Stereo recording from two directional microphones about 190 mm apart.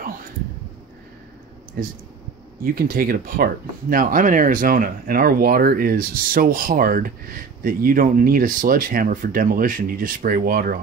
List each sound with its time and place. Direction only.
1.8 s speech: 50° right (ahead or behind)